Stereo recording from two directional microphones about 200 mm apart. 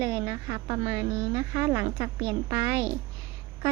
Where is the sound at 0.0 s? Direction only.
15° right (ahead or behind).